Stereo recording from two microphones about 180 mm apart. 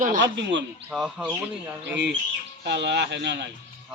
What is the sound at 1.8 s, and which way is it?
Speech, 75° right (ahead or behind).